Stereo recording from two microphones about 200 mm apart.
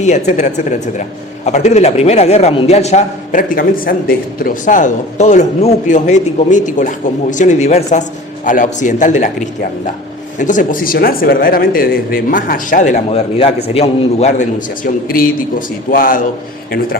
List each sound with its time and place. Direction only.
0.3 s speech: 35° left (ahead or behind)
15.0 s speech: 45° left (ahead or behind)